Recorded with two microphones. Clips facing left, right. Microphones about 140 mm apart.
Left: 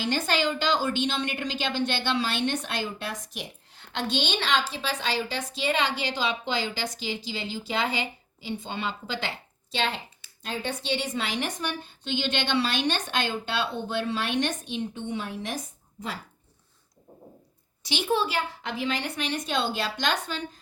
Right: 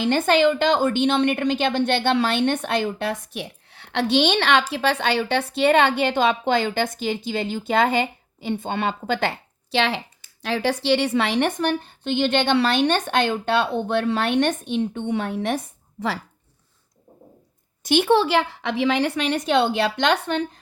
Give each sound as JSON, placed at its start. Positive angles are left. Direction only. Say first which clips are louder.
{"t": 0.0, "sound": "a woman's voice", "louder": "right 9 dB", "side_deg": -55}
{"t": 17.8, "sound": "speech", "louder": "right 9 dB", "side_deg": -60}